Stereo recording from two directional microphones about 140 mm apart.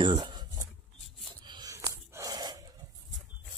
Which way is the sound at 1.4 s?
30° right (ahead or behind).